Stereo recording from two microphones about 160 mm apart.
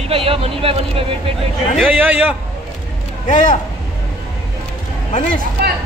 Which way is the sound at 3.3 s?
50° left (ahead or behind).